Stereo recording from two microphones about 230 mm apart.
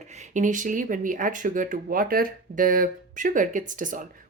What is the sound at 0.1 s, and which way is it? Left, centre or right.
Speech, right.